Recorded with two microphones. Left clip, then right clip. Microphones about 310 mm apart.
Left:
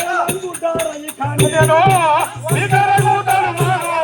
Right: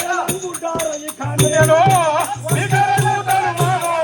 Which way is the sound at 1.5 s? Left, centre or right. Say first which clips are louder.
Even; centre.